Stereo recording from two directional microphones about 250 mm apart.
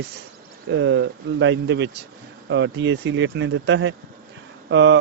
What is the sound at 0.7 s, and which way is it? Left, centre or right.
Speech, right.